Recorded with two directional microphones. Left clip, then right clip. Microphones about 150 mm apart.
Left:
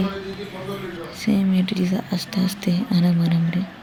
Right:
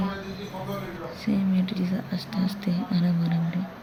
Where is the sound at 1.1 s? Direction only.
25° left (ahead or behind).